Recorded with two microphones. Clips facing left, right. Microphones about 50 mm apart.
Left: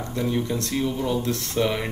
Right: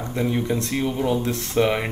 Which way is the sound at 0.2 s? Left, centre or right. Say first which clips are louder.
Right 2 dB; right.